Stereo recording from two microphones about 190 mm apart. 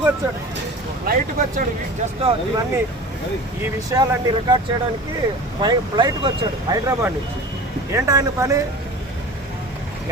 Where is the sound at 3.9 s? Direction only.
15° right (ahead or behind).